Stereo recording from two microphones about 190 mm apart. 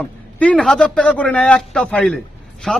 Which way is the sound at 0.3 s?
5° left (ahead or behind).